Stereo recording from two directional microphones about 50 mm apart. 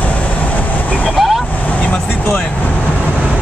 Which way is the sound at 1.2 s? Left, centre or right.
Centre.